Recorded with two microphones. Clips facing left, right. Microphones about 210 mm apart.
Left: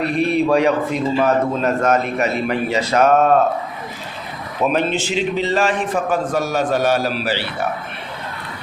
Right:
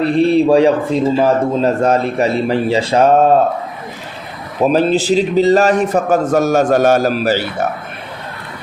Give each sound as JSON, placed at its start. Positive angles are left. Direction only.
{"t": 0.0, "sound": "a man's voice", "side_deg": -30}
{"t": 4.6, "sound": "a man's voice", "side_deg": -35}